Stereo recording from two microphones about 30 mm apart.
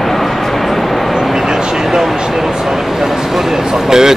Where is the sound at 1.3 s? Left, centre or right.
Centre.